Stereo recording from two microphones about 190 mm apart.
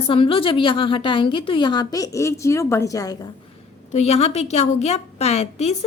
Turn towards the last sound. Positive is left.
turn(degrees=35)  # may be behind; listen again after turning